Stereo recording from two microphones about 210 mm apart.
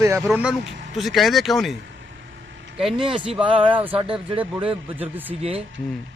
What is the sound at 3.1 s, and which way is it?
Speech, 5° right (ahead or behind).